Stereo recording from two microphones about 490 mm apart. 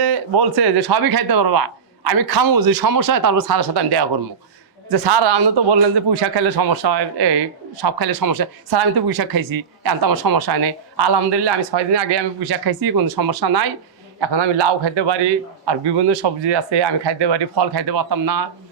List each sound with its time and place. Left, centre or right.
0.0 s a man's voice: right